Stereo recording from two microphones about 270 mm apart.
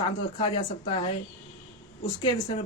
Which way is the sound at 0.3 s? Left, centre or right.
Centre.